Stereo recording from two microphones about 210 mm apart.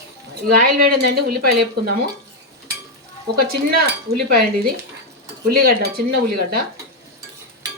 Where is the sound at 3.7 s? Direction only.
45° right (ahead or behind).